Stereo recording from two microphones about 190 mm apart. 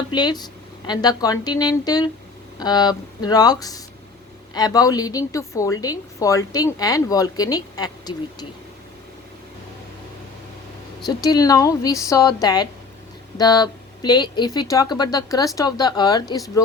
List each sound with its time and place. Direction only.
0.1 s speech: 20° left (ahead or behind)
11.0 s speech: 20° left (ahead or behind)